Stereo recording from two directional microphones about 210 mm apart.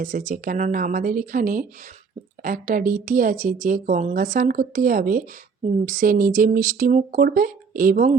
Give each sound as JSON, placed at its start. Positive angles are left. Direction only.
{"t": 0.0, "sound": "speech", "side_deg": -40}